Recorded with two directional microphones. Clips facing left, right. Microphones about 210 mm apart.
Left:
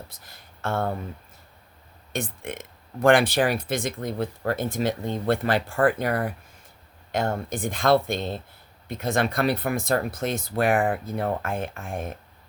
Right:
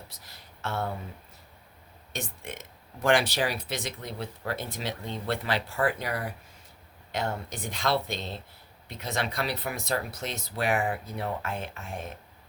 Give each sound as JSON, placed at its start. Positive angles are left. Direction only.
{"t": 0.1, "sound": "speech", "side_deg": 50}
{"t": 2.1, "sound": "speech", "side_deg": 55}